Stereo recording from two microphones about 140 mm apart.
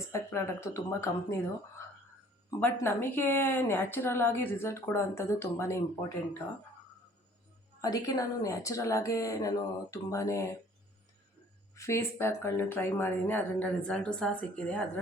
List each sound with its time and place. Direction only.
0.1 s speech: 20° left (ahead or behind)
2.6 s a woman's voice: 15° left (ahead or behind)
7.8 s speech: 25° left (ahead or behind)
11.7 s a woman's voice: 20° left (ahead or behind)